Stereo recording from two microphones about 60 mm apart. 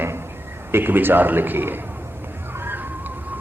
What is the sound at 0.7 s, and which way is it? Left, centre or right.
A man's voice, right.